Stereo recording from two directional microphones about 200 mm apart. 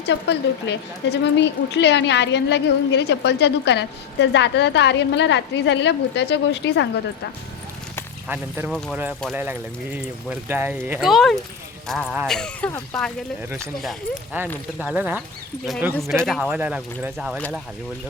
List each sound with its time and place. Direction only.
0.0 s a woman's voice: 60° left (ahead or behind)
8.3 s speech: 10° right (ahead or behind)
14.4 s speech: 10° right (ahead or behind)